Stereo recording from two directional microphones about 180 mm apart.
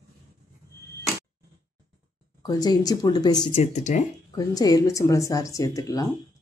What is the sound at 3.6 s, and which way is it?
Speech, 40° left (ahead or behind).